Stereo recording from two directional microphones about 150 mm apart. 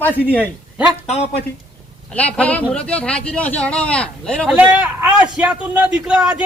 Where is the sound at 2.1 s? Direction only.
10° left (ahead or behind).